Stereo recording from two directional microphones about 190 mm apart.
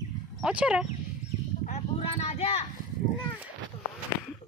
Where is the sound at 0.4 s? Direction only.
5° right (ahead or behind).